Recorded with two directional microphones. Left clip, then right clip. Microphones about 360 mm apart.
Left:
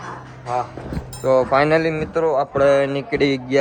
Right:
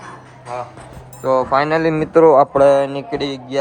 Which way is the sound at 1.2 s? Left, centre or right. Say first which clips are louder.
Even; centre.